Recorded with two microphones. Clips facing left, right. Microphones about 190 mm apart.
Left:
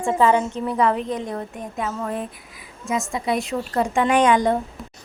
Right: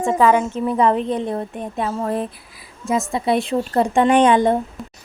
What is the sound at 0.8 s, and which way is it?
A woman's voice, 30° right (ahead or behind).